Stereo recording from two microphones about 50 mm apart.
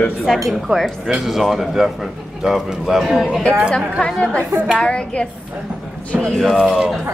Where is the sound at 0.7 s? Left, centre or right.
Centre.